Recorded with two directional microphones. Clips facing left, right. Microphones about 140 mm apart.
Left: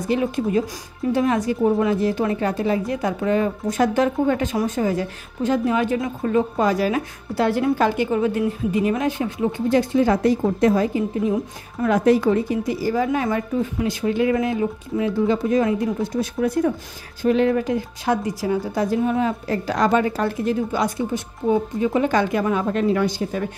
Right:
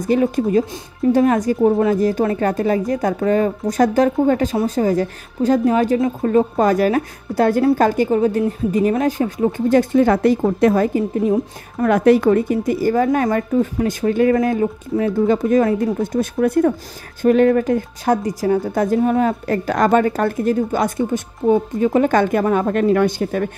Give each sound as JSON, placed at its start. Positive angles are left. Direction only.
{"t": 0.0, "sound": "a woman's voice", "side_deg": -45}